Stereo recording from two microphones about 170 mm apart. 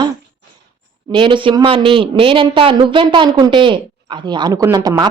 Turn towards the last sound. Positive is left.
turn(degrees=-20)  # may be behind; listen again after turning